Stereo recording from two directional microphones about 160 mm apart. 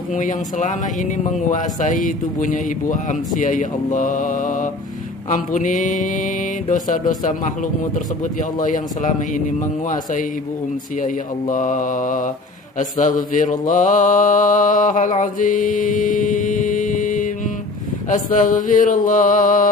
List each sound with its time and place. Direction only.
0.1 s speech: 55° left (ahead or behind)
8.5 s speech: 55° left (ahead or behind)
11.0 s mantra: 55° left (ahead or behind)
12.7 s speech: 55° left (ahead or behind)
18.1 s mantra: 55° left (ahead or behind)